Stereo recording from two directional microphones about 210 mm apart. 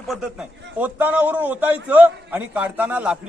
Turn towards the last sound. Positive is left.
turn(degrees=-5)  # may be behind; listen again after turning